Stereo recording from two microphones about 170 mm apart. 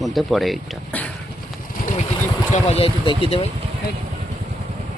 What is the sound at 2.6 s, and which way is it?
Speech, 35° left (ahead or behind).